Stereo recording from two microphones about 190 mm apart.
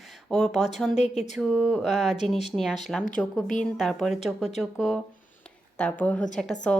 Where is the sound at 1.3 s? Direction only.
Centre (ahead or behind).